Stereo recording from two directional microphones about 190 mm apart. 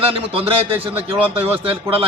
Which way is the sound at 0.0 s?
30° right (ahead or behind).